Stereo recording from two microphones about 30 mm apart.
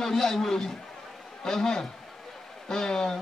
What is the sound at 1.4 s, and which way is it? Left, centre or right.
A man's voice, centre.